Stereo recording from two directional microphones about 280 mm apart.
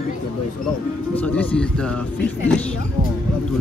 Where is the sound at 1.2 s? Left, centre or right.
Centre.